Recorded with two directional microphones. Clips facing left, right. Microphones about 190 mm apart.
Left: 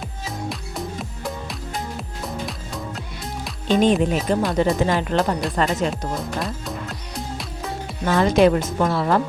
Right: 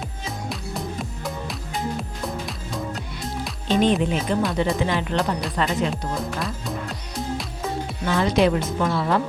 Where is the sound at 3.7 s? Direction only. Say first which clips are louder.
Left 2 dB; 45° left (ahead or behind).